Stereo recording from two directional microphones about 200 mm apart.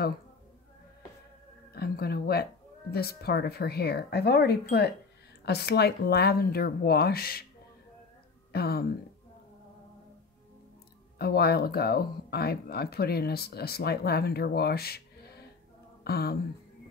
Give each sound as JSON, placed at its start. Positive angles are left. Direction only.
{"t": 1.7, "sound": "speech", "side_deg": 50}
{"t": 8.5, "sound": "speech", "side_deg": 50}
{"t": 11.1, "sound": "speech", "side_deg": 50}